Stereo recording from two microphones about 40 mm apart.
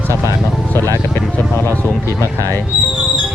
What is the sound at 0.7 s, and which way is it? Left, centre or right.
Speech, left.